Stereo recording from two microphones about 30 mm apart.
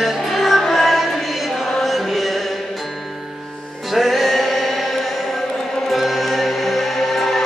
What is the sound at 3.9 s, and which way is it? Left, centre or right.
Music, centre.